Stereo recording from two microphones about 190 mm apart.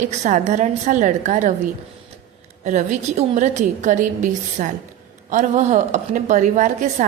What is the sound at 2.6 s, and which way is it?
A woman's voice, 40° right (ahead or behind).